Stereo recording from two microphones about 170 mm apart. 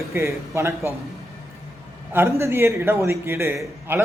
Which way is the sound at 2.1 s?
15° right (ahead or behind).